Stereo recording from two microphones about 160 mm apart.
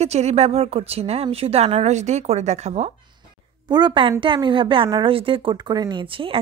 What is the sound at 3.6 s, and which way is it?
Speech, 25° right (ahead or behind).